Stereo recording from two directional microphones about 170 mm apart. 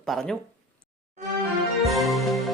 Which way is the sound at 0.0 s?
Centre (ahead or behind).